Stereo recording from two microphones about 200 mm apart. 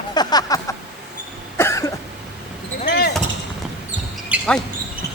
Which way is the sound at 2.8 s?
50° left (ahead or behind).